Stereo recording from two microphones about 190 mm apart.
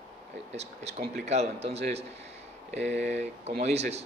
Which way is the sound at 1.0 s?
55° right (ahead or behind).